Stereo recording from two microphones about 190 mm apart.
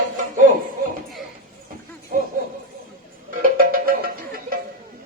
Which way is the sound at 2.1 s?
45° right (ahead or behind).